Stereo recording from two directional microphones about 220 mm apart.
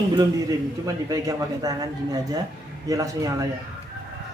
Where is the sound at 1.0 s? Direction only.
15° right (ahead or behind).